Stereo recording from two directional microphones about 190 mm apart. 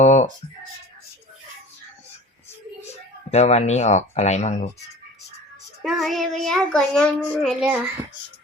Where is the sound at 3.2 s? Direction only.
35° left (ahead or behind).